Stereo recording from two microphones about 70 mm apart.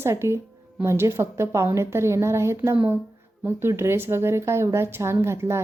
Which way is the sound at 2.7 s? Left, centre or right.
Right.